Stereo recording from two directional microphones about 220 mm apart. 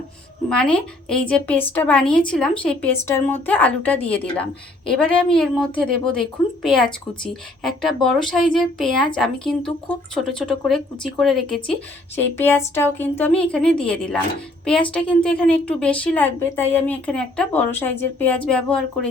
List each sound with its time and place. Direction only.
0.5 s a woman's voice: 5° left (ahead or behind)